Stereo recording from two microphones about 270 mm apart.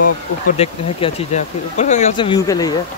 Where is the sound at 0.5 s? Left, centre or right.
Left.